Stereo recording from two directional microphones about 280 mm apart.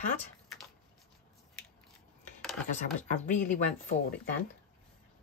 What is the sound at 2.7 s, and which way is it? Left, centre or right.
Speech, left.